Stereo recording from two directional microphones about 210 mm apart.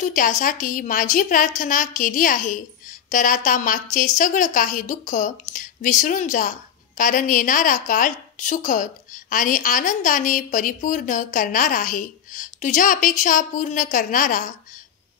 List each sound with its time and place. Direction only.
0.0 s a woman's voice: 35° left (ahead or behind)